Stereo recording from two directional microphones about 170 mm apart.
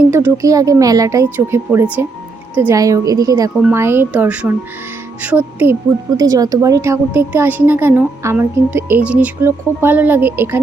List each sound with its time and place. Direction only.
0.1 s a woman's voice: 15° right (ahead or behind)
6.1 s a woman's voice: 20° right (ahead or behind)